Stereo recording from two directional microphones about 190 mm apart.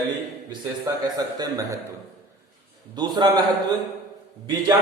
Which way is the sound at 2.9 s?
20° right (ahead or behind).